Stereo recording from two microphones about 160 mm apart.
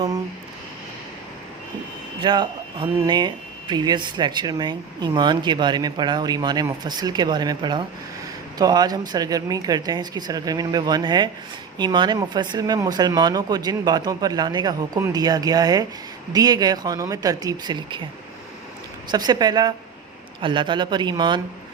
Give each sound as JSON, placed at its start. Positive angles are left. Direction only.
{"t": 2.2, "sound": "speech", "side_deg": -30}
{"t": 19.1, "sound": "speech", "side_deg": -25}